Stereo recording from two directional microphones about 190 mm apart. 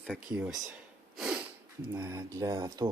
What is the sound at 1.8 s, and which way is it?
Speech, 20° right (ahead or behind).